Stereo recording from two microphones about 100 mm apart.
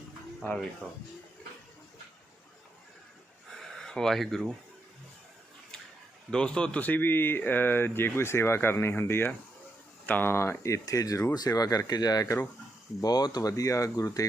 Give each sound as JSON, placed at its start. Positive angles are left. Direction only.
{"t": 0.3, "sound": "speech", "side_deg": 10}
{"t": 3.5, "sound": "a sound", "side_deg": 5}
{"t": 6.3, "sound": "speech", "side_deg": 10}